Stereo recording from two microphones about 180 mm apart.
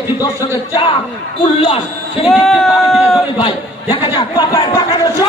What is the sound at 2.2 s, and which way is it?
Speech, centre (ahead or behind).